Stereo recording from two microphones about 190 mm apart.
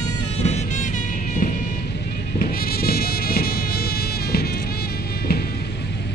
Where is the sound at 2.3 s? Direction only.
55° left (ahead or behind).